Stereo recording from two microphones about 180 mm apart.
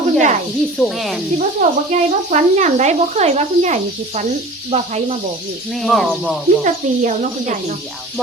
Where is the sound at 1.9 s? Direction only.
40° right (ahead or behind).